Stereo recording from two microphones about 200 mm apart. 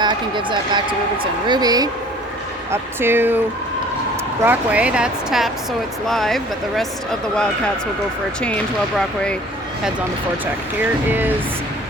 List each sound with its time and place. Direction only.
0.0 s speech: 20° right (ahead or behind)
4.4 s speech: 5° right (ahead or behind)
11.1 s speech: 10° right (ahead or behind)